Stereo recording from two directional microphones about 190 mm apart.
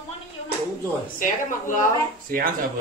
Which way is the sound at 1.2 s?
45° left (ahead or behind).